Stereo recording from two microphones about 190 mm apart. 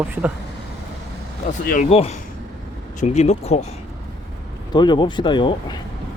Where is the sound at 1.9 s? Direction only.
30° left (ahead or behind).